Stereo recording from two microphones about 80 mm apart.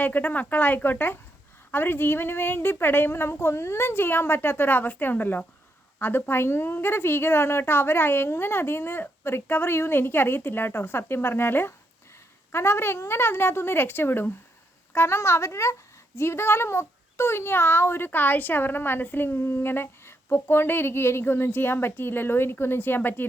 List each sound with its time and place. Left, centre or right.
0.0 s speech: left